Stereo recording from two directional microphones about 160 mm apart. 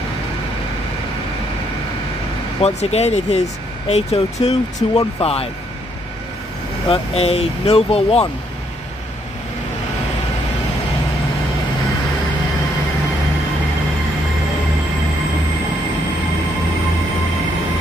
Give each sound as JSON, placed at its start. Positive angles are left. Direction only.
{"t": 2.6, "sound": "speech", "side_deg": 40}
{"t": 6.9, "sound": "speech", "side_deg": 40}